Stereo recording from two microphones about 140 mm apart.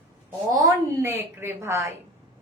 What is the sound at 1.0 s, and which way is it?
Speech, 15° right (ahead or behind).